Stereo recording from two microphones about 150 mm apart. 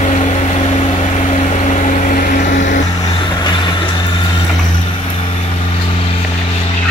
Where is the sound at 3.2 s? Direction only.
30° left (ahead or behind).